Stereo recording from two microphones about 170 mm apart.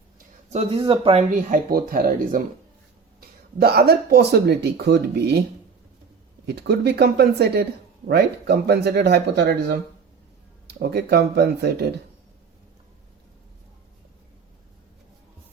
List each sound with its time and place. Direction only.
0.5 s speech: 35° right (ahead or behind)
1.3 s speech: 50° right (ahead or behind); by 5.4 s 70° right (ahead or behind)
6.4 s speech: 75° right (ahead or behind)